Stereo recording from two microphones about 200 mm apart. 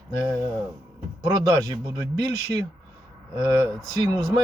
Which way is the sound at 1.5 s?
15° right (ahead or behind).